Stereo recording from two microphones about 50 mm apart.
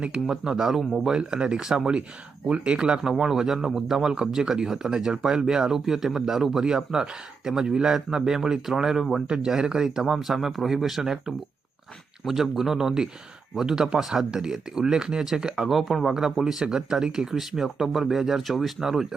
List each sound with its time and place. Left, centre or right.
0.0 s speech: centre
1.2 s speech: centre
15.7 s speech: centre